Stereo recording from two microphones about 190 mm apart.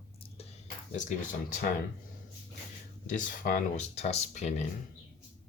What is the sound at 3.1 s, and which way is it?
Speech, 40° left (ahead or behind).